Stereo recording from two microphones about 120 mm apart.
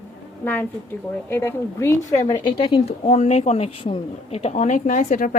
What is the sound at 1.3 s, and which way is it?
A woman's voice, 20° left (ahead or behind).